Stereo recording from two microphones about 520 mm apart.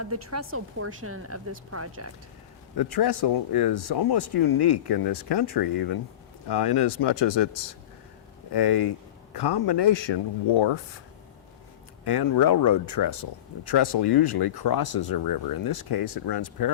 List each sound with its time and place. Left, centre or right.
0.0 s speech: right
2.7 s speech: left
12.0 s speech: left